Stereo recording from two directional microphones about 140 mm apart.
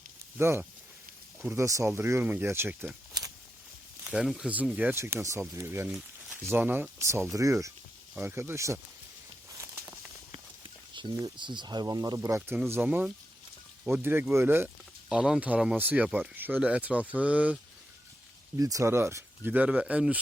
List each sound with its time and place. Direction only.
0.3 s speech: 20° right (ahead or behind)
3.1 s a sound: 25° right (ahead or behind)
4.0 s speech: 5° right (ahead or behind); by 8.8 s 20° right (ahead or behind)
9.5 s walk: 20° right (ahead or behind)
10.3 s a sound: 35° right (ahead or behind)
11.3 s speech: 35° right (ahead or behind); by 17.6 s 10° right (ahead or behind)
18.5 s speech: 25° right (ahead or behind)